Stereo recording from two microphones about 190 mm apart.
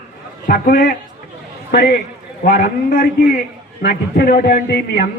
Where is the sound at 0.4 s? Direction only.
50° left (ahead or behind).